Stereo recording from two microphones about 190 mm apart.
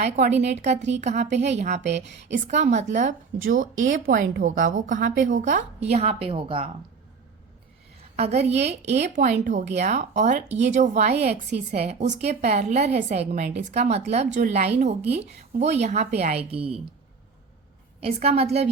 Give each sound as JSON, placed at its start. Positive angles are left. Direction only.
{"t": 0.0, "sound": "a woman's voice", "side_deg": -35}
{"t": 3.8, "sound": "a woman's voice", "side_deg": -90}
{"t": 4.0, "sound": "a woman's voice", "side_deg": -50}
{"t": 8.1, "sound": "a woman's voice", "side_deg": -35}
{"t": 18.0, "sound": "a woman's voice", "side_deg": -35}